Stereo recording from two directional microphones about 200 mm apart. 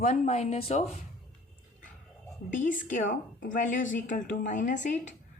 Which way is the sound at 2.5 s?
40° left (ahead or behind).